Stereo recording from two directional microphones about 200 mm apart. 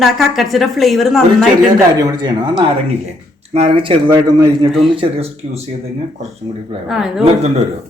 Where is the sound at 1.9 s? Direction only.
20° right (ahead or behind).